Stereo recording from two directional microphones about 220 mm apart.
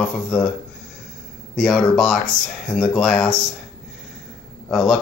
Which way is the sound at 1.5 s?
Centre (ahead or behind).